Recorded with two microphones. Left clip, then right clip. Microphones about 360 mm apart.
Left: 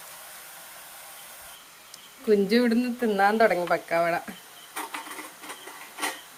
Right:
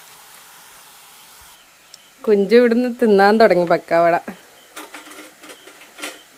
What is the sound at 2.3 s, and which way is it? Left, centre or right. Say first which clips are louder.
Speech: right 9 dB; centre.